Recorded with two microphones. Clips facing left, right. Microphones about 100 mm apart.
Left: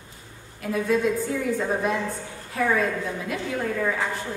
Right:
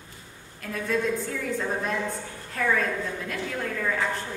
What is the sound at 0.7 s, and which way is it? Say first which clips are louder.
A woman's voice: left 4 dB; 10° left (ahead or behind).